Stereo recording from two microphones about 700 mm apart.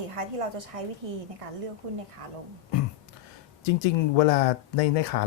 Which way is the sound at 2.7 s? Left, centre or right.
Left.